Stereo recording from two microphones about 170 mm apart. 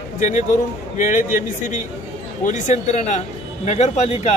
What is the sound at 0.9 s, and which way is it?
Speech, 50° left (ahead or behind).